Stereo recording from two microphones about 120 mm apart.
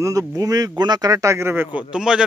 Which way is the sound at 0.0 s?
30° right (ahead or behind).